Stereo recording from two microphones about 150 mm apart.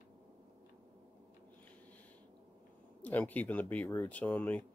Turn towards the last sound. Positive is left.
turn(degrees=10)  # may be behind; listen again after turning